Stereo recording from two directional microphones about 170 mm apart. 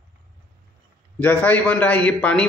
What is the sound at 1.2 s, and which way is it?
A man's voice, 10° left (ahead or behind).